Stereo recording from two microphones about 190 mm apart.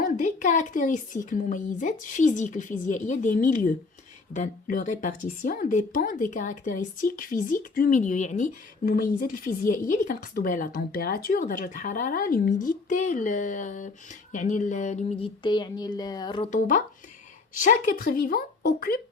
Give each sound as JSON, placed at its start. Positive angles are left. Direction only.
{"t": 0.0, "sound": "speech", "side_deg": 40}
{"t": 16.5, "sound": "speech", "side_deg": 45}